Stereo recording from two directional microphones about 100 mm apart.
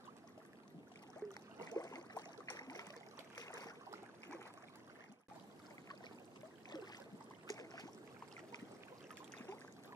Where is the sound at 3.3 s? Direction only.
35° left (ahead or behind).